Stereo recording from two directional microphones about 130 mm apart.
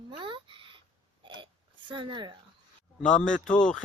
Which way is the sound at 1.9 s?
40° right (ahead or behind).